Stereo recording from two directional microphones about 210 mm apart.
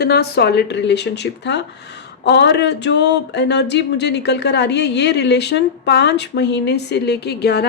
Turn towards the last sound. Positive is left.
turn(degrees=50)  # may be behind; listen again after turning